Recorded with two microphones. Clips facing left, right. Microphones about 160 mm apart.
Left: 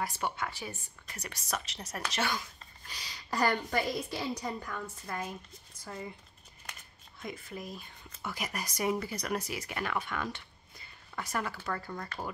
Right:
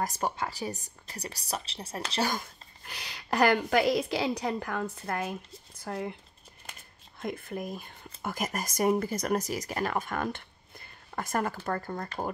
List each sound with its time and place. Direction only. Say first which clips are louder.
0.0 s speech: right 4 dB; 40° right (ahead or behind)
2.3 s a woman's voice: right 3 dB; 55° right (ahead or behind)
7.2 s speech: right 6 dB; 55° right (ahead or behind)